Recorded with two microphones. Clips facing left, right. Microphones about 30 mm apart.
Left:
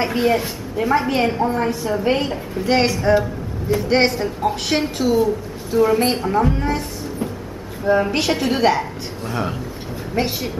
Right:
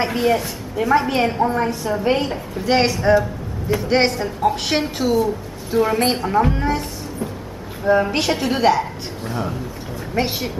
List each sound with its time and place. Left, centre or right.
0.0 s a woman's voice: centre
7.8 s a woman's voice: centre
10.2 s a woman's voice: centre